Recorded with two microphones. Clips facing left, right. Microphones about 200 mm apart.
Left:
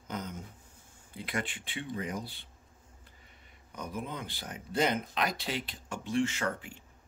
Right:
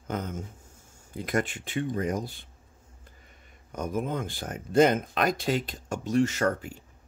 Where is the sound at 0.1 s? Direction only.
50° right (ahead or behind).